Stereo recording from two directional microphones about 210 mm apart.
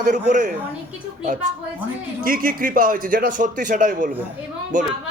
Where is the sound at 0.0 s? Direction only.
40° right (ahead or behind).